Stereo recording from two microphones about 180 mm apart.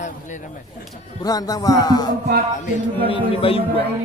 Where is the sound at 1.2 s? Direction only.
20° left (ahead or behind).